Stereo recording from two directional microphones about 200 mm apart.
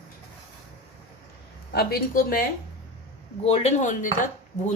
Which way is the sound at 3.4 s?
35° left (ahead or behind).